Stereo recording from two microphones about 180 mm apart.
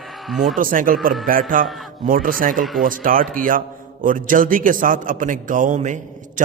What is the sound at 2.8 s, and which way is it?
A man's voice, 50° right (ahead or behind).